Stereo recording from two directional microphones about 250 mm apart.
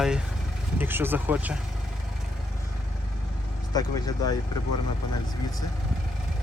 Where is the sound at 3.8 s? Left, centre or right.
Centre.